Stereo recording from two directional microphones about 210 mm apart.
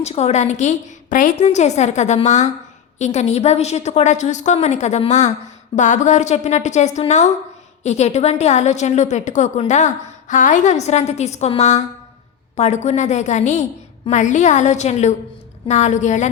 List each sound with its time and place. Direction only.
0.0 s a woman's voice: 30° left (ahead or behind)